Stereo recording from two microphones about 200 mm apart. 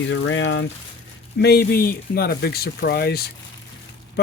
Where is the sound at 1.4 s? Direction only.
50° left (ahead or behind).